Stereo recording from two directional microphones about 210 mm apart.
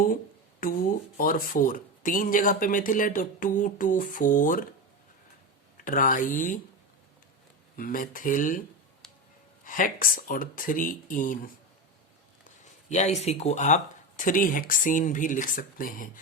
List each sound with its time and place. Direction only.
0.6 s speech: 40° left (ahead or behind)
5.7 s speech: 40° left (ahead or behind)
7.8 s speech: 40° left (ahead or behind)
9.6 s speech: 40° left (ahead or behind)
12.9 s speech: 35° left (ahead or behind)